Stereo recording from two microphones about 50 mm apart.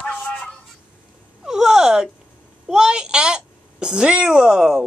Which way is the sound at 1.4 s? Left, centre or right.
Centre.